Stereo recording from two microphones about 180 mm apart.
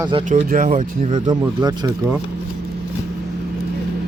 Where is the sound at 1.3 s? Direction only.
25° right (ahead or behind).